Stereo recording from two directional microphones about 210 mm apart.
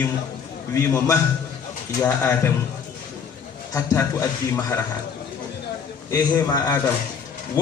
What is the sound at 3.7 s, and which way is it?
A man's voice, 15° left (ahead or behind).